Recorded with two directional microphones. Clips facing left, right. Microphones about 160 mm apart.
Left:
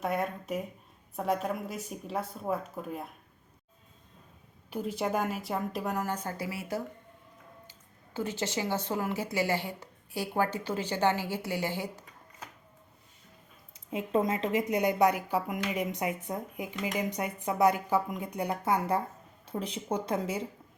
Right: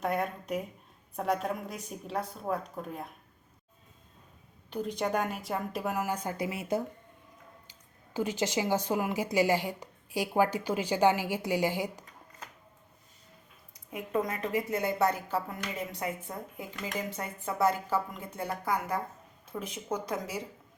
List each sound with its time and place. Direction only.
0.0 s speech: centre (ahead or behind)
4.7 s speech: 5° left (ahead or behind); by 12.0 s 15° right (ahead or behind)
13.7 s speech: 25° left (ahead or behind)